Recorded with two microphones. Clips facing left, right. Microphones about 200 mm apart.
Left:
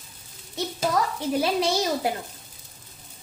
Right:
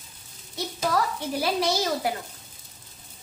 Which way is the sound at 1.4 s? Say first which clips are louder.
Left 1 dB; 25° left (ahead or behind).